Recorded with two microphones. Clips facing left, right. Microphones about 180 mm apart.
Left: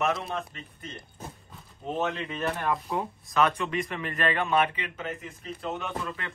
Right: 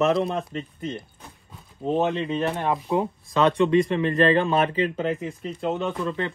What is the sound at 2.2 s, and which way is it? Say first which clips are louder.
Speech: right 6 dB; 30° right (ahead or behind).